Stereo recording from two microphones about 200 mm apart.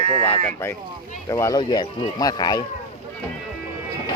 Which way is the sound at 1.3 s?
15° left (ahead or behind).